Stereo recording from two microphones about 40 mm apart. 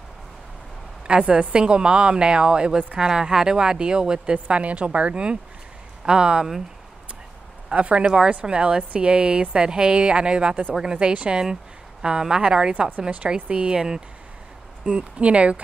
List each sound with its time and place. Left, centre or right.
1.0 s speech: right
7.7 s speech: right
14.9 s speech: right